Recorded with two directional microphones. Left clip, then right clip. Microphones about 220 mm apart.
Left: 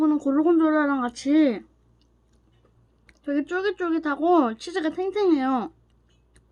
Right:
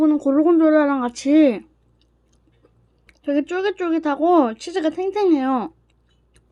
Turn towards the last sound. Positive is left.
turn(degrees=-10)  # may be behind; listen again after turning